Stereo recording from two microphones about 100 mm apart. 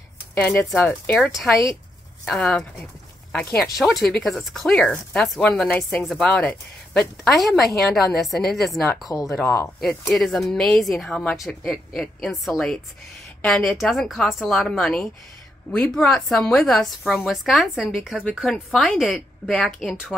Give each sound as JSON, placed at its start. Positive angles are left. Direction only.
{"t": 0.4, "sound": "speech", "side_deg": 15}
{"t": 1.3, "sound": "a woman's voice", "side_deg": 0}
{"t": 9.1, "sound": "speech", "side_deg": 35}
{"t": 10.1, "sound": "a woman's voice", "side_deg": 0}